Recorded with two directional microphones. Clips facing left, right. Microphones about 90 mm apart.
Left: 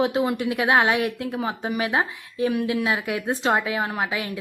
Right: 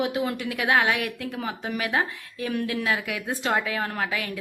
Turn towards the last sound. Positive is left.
turn(degrees=20)  # may be behind; listen again after turning